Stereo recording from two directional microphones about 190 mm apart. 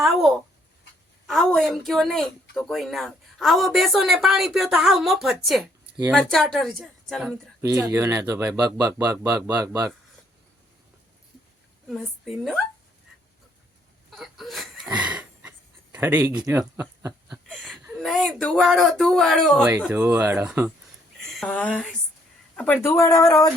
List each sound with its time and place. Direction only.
0.0 s speech: centre (ahead or behind)
7.6 s speech: 15° right (ahead or behind)
11.9 s speech: centre (ahead or behind)
14.1 s a sound: centre (ahead or behind)
16.0 s speech: 10° right (ahead or behind)
17.2 s speech: centre (ahead or behind)
19.9 s speech: 10° right (ahead or behind); by 23.5 s 20° left (ahead or behind)